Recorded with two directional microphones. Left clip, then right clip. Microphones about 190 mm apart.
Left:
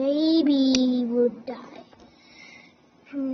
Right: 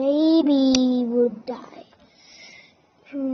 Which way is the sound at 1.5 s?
35° right (ahead or behind).